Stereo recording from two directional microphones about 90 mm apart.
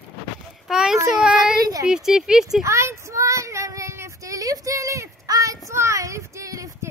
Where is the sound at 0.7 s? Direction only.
5° right (ahead or behind).